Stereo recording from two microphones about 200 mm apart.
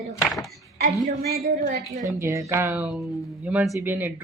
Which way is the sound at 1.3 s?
45° right (ahead or behind).